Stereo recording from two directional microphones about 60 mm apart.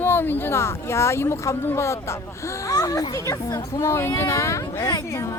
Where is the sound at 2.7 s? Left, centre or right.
Left.